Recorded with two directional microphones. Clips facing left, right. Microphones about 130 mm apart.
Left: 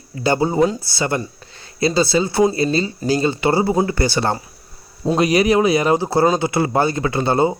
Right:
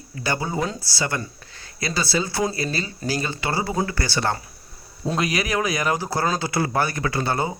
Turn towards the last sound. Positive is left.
turn(degrees=25)  # may be behind; listen again after turning